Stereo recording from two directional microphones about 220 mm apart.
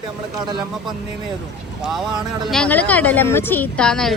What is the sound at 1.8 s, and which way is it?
Speech, centre (ahead or behind).